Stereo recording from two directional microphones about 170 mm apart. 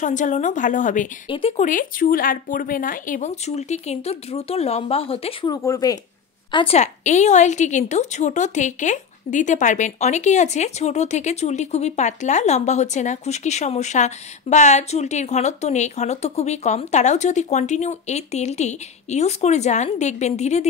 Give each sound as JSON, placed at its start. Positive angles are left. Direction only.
{"t": 0.0, "sound": "speech", "side_deg": 45}
{"t": 5.5, "sound": "speech", "side_deg": 20}
{"t": 6.5, "sound": "speech", "side_deg": 35}